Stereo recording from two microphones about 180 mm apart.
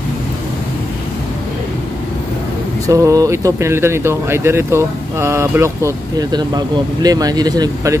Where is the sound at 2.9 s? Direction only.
20° right (ahead or behind).